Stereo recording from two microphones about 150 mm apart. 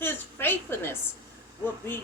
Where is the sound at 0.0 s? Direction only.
15° left (ahead or behind).